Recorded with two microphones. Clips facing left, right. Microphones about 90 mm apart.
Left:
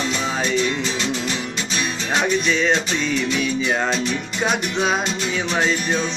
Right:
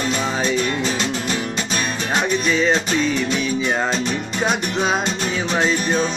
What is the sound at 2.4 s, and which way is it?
Music, 5° right (ahead or behind).